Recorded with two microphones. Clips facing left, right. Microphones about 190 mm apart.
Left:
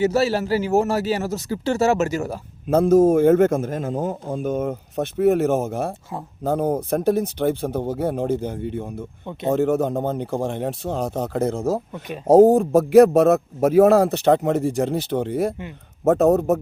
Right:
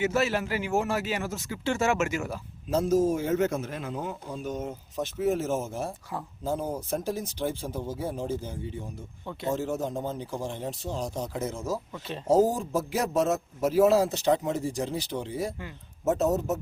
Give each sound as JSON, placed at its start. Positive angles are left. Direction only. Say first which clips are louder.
{"t": 0.0, "sound": "a man's voice", "louder": "left 7 dB", "side_deg": 35}
{"t": 2.6, "sound": "a man's voice", "louder": "left 9 dB", "side_deg": 55}